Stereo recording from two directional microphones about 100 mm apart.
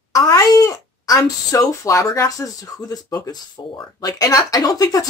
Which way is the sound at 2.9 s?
40° left (ahead or behind).